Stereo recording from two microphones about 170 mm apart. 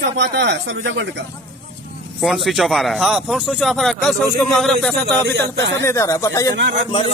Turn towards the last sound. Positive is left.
turn(degrees=-90)